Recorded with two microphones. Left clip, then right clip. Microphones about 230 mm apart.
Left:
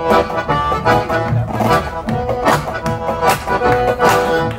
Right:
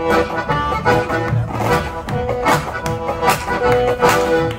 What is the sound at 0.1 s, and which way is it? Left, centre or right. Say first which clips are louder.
Accordion: left 4 dB; left.